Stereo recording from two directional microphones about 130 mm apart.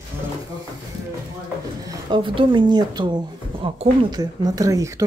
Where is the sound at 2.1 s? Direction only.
40° right (ahead or behind).